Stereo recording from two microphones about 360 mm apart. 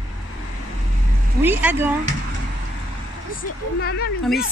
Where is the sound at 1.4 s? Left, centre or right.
Centre.